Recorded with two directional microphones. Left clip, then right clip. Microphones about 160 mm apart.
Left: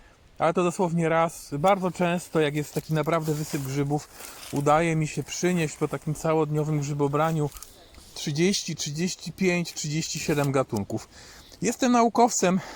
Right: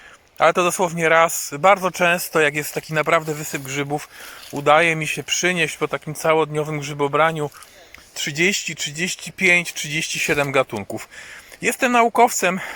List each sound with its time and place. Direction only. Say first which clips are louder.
0.3 s speech: right 7 dB; centre (ahead or behind)